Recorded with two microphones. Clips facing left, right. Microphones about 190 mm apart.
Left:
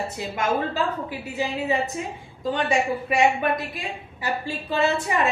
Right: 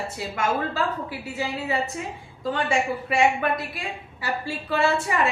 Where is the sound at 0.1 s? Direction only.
20° left (ahead or behind).